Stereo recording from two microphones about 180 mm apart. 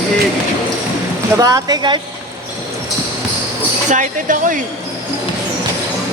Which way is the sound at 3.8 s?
45° right (ahead or behind).